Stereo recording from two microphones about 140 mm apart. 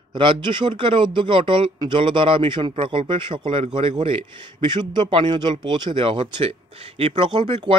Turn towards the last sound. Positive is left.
turn(degrees=-40)  # may be behind; listen again after turning